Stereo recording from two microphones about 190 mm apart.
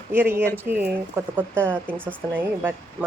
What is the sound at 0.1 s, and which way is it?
Speech, 10° right (ahead or behind).